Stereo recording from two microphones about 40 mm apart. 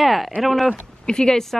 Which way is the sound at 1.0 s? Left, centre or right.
Centre.